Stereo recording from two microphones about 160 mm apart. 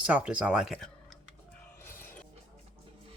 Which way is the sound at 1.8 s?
15° left (ahead or behind).